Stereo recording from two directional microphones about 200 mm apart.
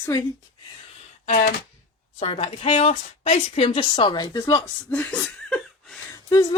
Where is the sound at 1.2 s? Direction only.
40° left (ahead or behind).